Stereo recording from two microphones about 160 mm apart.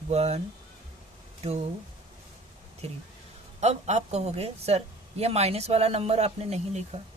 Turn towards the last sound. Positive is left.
turn(degrees=-40)  # may be behind; listen again after turning